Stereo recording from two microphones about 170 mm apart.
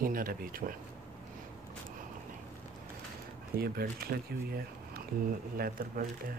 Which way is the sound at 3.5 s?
65° right (ahead or behind).